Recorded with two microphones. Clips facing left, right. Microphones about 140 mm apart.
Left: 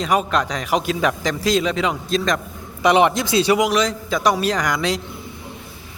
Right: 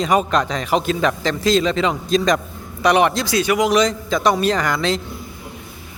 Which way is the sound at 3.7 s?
5° left (ahead or behind).